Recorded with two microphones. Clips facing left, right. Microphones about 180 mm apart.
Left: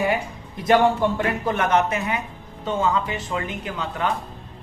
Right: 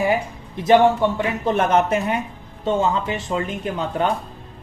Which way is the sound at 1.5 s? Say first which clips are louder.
Right 4 dB; 30° right (ahead or behind).